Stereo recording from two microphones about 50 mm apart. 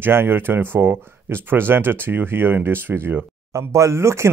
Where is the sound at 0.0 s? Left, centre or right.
Right.